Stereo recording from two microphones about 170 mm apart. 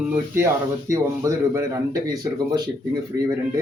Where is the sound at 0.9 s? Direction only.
20° right (ahead or behind).